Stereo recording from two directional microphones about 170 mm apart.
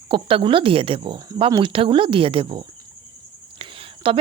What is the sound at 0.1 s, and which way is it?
Speech, 30° right (ahead or behind).